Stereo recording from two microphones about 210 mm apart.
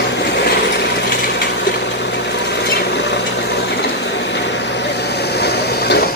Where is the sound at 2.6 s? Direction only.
50° left (ahead or behind).